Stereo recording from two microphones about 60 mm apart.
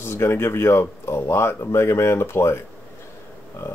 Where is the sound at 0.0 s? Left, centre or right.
Left.